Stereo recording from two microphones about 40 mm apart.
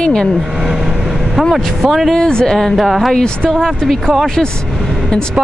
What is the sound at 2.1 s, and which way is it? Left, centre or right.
Speech, centre.